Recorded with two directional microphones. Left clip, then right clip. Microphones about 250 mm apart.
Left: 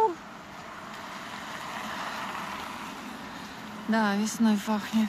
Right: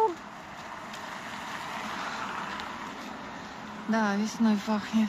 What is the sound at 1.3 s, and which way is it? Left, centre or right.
Vehicle, centre.